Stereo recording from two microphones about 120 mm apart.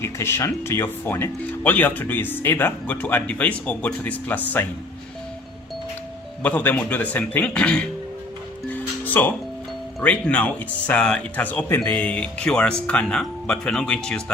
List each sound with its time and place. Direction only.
0.0 s speech: 20° left (ahead or behind)
6.4 s speech: 15° left (ahead or behind)
8.7 s music: 15° left (ahead or behind)
10.0 s speech: 10° left (ahead or behind)